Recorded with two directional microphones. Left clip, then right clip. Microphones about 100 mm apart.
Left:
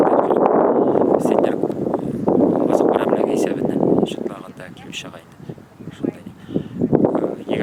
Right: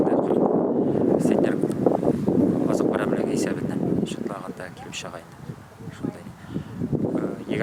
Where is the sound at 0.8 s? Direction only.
85° left.